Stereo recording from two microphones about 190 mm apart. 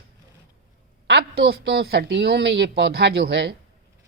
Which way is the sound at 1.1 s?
60° right (ahead or behind).